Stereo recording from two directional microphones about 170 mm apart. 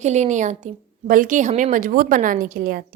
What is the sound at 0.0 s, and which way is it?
A woman's voice, 45° right (ahead or behind).